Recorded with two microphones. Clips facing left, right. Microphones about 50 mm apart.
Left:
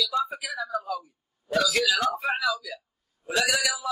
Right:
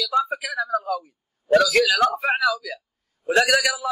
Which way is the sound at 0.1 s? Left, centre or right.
Right.